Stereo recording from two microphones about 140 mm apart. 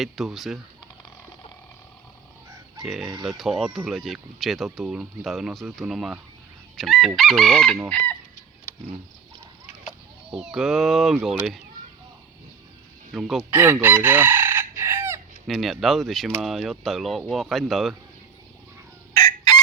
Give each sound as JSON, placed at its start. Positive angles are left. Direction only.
{"t": 0.0, "sound": "speech", "side_deg": 0}
{"t": 2.8, "sound": "speech", "side_deg": -5}
{"t": 10.3, "sound": "speech", "side_deg": -5}
{"t": 13.1, "sound": "speech", "side_deg": -5}
{"t": 13.5, "sound": "chicken", "side_deg": -15}
{"t": 15.4, "sound": "speech", "side_deg": 0}